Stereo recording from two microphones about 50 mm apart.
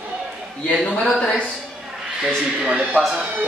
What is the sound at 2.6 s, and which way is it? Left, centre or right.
Speech, centre.